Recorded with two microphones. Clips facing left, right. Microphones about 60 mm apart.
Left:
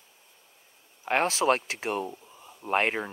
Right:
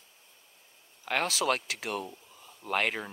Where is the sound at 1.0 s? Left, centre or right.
Left.